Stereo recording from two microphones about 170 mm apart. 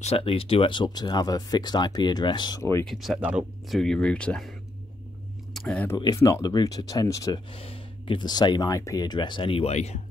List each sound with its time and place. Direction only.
0.0 s speech: 35° left (ahead or behind); by 2.8 s 20° left (ahead or behind)
2.9 s speech: centre (ahead or behind)
5.5 s a sound: centre (ahead or behind)
5.9 s speech: 20° left (ahead or behind)
7.5 s speech: 35° left (ahead or behind)